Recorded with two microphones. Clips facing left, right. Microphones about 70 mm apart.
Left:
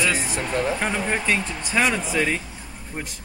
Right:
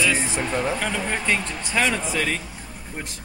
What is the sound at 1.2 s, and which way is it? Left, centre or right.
Speech, centre.